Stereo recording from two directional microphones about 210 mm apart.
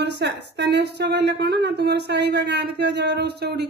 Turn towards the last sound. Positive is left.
turn(degrees=-50)  # may be behind; listen again after turning